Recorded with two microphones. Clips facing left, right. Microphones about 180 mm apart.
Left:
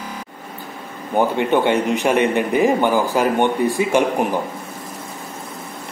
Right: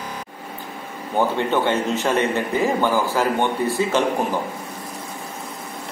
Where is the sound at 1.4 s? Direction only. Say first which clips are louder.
Left 3 dB; 15° left (ahead or behind).